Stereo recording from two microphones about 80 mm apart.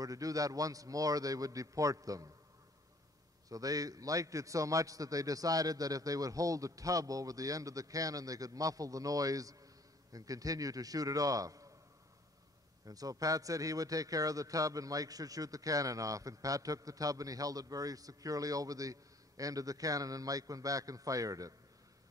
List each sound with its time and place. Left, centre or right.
0.0 s a man's voice: right
3.4 s a man's voice: right
12.8 s a man's voice: right